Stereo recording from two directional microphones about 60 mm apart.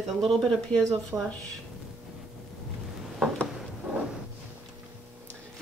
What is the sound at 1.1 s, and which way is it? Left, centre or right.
Speech, right.